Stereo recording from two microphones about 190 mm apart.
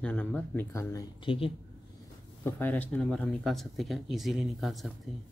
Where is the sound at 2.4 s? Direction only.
10° left (ahead or behind).